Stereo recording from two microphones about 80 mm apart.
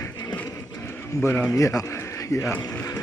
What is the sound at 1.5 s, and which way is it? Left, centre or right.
Speech, left.